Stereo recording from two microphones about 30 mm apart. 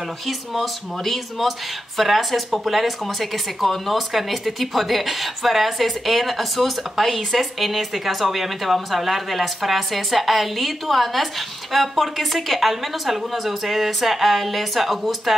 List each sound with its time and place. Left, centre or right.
0.3 s speech: centre